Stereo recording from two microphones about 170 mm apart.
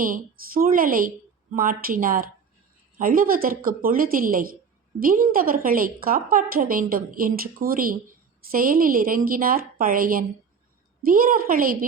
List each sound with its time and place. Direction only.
0.0 s a woman's voice: 55° right (ahead or behind)